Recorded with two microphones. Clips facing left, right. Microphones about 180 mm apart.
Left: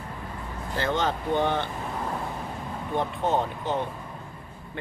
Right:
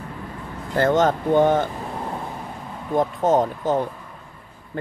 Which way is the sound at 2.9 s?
40° right (ahead or behind).